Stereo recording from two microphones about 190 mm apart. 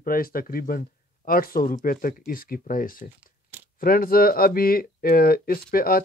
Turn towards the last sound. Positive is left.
turn(degrees=50)  # may be behind; listen again after turning